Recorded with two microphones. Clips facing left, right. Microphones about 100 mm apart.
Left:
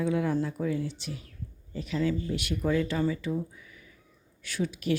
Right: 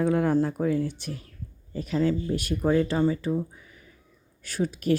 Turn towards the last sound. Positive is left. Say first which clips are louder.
# right 4 dB
turn(degrees=-45)  # may be behind; listen again after turning